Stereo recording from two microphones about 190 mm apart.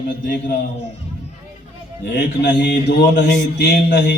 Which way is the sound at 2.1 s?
65° left (ahead or behind).